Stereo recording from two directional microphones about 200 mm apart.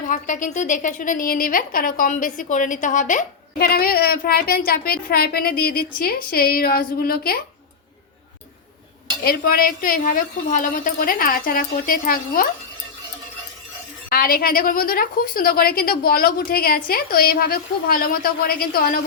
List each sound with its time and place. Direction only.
0.1 s a woman's voice: 40° left (ahead or behind)
9.2 s a woman's voice: 50° left (ahead or behind)
14.1 s a woman's voice: 50° left (ahead or behind)